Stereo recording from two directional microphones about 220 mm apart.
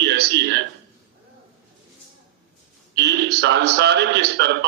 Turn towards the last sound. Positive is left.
turn(degrees=-50)  # may be behind; listen again after turning